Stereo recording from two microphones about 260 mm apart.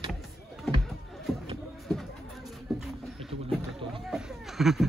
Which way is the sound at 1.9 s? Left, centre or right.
Centre.